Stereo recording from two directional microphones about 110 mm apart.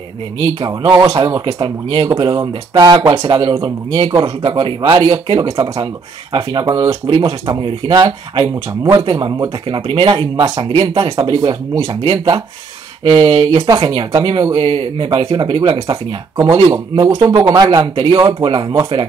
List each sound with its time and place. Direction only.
0.4 s speech: 45° right (ahead or behind)
16.9 s speech: 35° right (ahead or behind)